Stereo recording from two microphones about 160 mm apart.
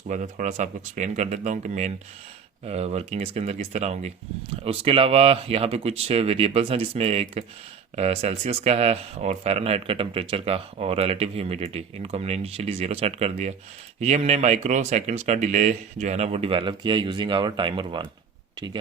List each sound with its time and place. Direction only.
0.1 s speech: 50° right (ahead or behind); by 18.0 s 30° right (ahead or behind)